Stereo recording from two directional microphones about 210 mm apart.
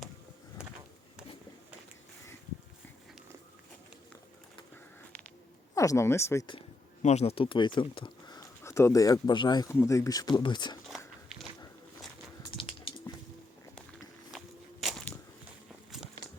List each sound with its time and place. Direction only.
5.7 s speech: 15° left (ahead or behind)
6.6 s speech: 30° left (ahead or behind)
12.5 s a sound: 25° left (ahead or behind)
14.3 s walk: centre (ahead or behind)